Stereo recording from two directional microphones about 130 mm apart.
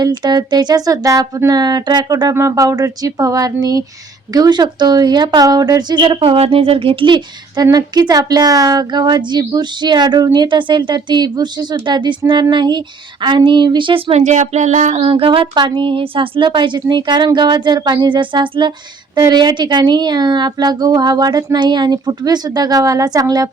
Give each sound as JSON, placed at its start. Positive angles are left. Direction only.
{"t": 0.0, "sound": "a woman's voice", "side_deg": -35}
{"t": 6.1, "sound": "a woman's voice", "side_deg": -50}
{"t": 14.1, "sound": "speech", "side_deg": -60}
{"t": 14.9, "sound": "a woman's voice", "side_deg": -45}